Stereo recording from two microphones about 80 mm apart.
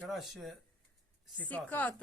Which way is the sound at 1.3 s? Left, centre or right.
Centre.